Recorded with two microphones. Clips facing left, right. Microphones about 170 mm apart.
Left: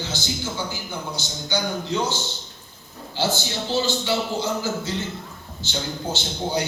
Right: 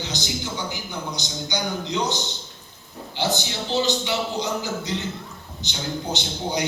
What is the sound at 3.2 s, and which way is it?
A man's voice, 20° right (ahead or behind).